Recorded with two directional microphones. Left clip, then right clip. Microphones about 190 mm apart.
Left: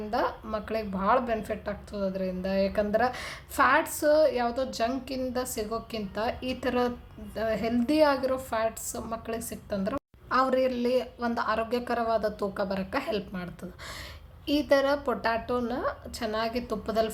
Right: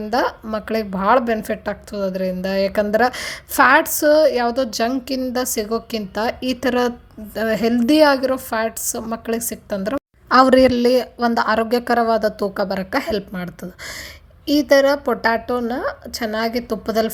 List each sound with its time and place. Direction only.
0.0 s a woman's voice: 40° right (ahead or behind)